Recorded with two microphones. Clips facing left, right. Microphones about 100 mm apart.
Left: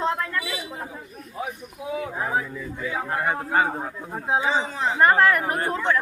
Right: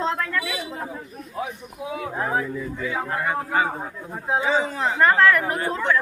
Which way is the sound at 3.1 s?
35° left (ahead or behind).